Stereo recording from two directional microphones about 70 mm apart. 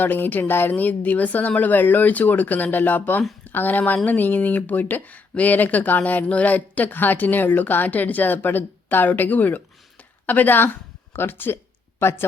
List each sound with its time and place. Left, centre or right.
0.0 s speech: left